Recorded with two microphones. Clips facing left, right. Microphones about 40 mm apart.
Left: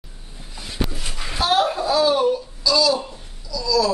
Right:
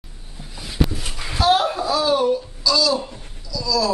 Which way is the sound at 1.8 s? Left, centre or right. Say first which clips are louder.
Left 2 dB; left.